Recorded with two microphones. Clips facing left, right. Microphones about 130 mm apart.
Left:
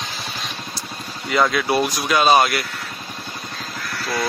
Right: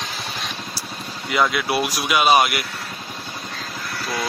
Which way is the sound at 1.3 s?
5° right (ahead or behind).